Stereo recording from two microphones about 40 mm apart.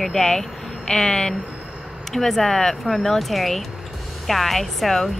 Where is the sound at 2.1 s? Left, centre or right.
Centre.